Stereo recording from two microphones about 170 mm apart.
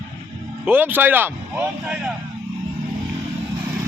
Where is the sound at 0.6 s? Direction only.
10° right (ahead or behind).